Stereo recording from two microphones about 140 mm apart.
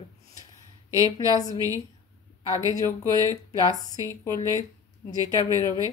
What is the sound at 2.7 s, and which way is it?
Speech, 25° left (ahead or behind).